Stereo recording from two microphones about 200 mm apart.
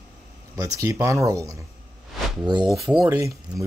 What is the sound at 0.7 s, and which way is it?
Speech, 15° right (ahead or behind).